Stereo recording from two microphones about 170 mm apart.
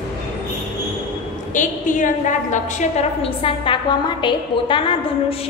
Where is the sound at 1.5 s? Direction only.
50° left (ahead or behind).